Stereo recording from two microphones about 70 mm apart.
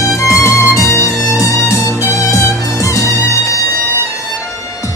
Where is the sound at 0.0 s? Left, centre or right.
Left.